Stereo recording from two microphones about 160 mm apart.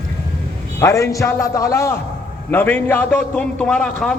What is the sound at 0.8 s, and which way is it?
A man's voice, 20° left (ahead or behind).